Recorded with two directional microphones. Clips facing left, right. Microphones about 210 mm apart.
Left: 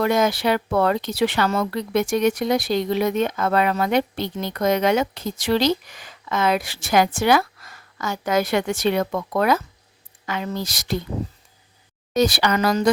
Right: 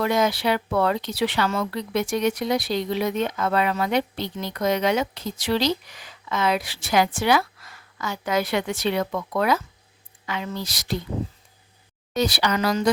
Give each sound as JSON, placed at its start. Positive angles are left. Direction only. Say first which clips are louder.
{"t": 0.0, "sound": "speech", "louder": "left 2 dB", "side_deg": 45}
{"t": 12.1, "sound": "speech", "louder": "left 4 dB", "side_deg": 45}